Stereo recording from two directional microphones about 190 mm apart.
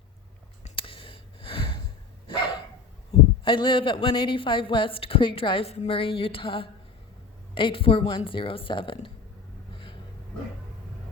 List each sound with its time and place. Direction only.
0.6 s a sound: 30° left (ahead or behind)
3.1 s speech: 25° left (ahead or behind)
9.7 s vehicle: 25° left (ahead or behind)